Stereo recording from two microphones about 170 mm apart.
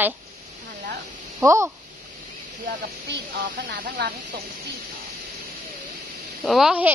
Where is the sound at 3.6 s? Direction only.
55° right (ahead or behind).